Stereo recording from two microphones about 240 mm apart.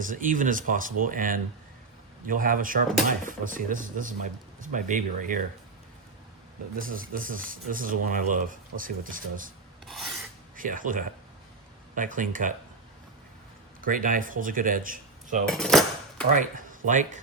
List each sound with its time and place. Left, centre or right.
0.0 s speech: right
6.7 s speech: right
9.8 s filing: centre
10.6 s speech: right
13.8 s speech: right
15.4 s cutlery: centre
16.3 s speech: right